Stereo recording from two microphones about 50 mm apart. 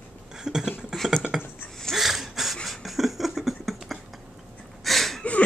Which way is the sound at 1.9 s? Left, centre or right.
Centre.